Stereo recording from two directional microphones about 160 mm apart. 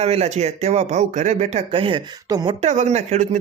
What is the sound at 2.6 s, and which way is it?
Speech, 45° right (ahead or behind).